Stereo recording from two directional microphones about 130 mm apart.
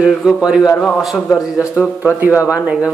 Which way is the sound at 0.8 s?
5° left (ahead or behind).